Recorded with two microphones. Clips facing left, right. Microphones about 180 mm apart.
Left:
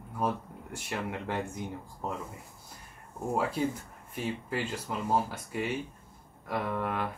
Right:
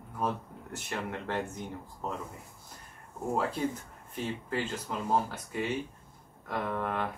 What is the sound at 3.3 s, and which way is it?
Speech, 10° left (ahead or behind).